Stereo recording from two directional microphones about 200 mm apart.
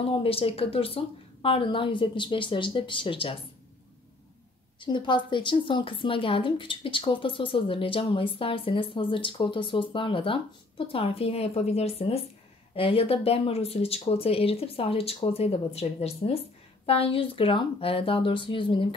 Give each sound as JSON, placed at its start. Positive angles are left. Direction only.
{"t": 0.2, "sound": "a woman's voice", "side_deg": 30}
{"t": 4.7, "sound": "a woman's voice", "side_deg": 25}